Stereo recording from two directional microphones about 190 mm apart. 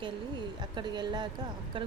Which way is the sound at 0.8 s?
25° right (ahead or behind).